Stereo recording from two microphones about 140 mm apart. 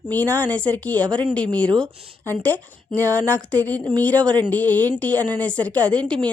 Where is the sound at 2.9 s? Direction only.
20° right (ahead or behind).